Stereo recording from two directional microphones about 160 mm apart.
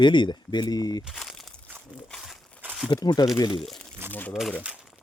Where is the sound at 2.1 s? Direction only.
Centre (ahead or behind).